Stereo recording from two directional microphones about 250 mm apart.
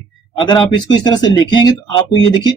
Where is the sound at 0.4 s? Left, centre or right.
Centre.